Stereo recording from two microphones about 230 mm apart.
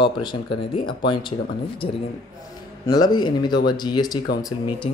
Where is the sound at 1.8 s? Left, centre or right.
Left.